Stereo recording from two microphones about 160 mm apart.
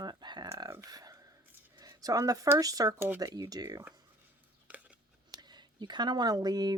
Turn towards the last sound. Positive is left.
turn(degrees=-25)  # may be behind; listen again after turning